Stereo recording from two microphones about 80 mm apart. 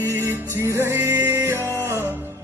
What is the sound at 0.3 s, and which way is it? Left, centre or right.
Music, right.